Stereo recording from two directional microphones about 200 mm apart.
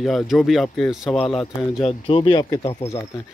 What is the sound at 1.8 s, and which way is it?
Speech, 25° left (ahead or behind).